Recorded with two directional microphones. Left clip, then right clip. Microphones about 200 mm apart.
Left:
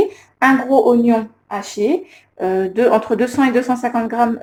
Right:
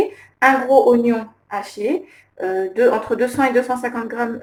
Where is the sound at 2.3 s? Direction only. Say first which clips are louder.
Left 3 dB; 30° left (ahead or behind).